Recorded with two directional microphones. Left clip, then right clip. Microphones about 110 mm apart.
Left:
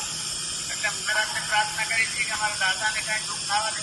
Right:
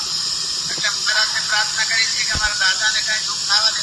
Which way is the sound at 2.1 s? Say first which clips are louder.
Right 7 dB; 40° left (ahead or behind).